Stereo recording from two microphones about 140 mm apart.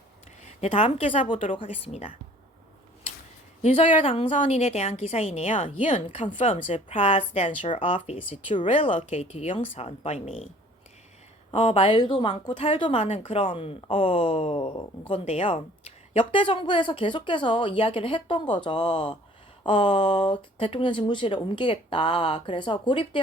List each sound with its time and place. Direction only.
0.4 s a woman's voice: 45° left (ahead or behind)
3.6 s a woman's voice: 50° left (ahead or behind)
4.3 s a woman's voice: 55° left (ahead or behind)
5.6 s a woman's voice: 40° left (ahead or behind)
11.5 s a woman's voice: 45° left (ahead or behind)